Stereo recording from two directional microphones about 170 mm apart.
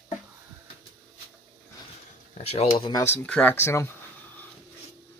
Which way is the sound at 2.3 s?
35° left (ahead or behind).